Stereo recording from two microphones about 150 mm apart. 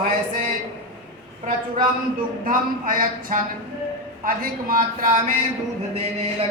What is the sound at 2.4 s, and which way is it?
Speech, 70° right (ahead or behind).